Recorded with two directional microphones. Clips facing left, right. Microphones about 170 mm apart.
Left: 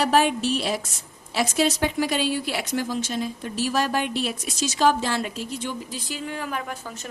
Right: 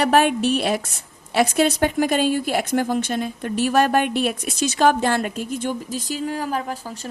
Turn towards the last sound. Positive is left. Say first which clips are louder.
# right 4 dB
turn(degrees=-35)  # may be behind; listen again after turning